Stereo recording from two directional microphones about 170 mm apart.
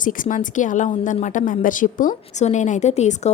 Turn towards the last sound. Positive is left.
turn(degrees=40)  # may be behind; listen again after turning